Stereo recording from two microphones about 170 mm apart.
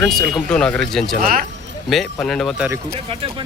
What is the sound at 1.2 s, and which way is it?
Speech, 60° right (ahead or behind).